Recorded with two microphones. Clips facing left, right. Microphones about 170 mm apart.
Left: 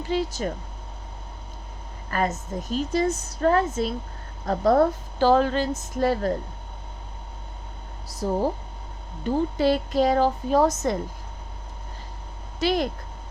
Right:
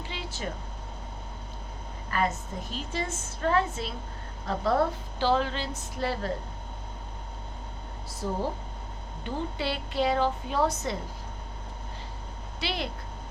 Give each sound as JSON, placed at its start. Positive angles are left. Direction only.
{"t": 0.0, "sound": "speech", "side_deg": 40}
{"t": 2.0, "sound": "a woman's voice", "side_deg": 40}
{"t": 8.0, "sound": "a woman's voice", "side_deg": 40}
{"t": 12.5, "sound": "speech", "side_deg": 45}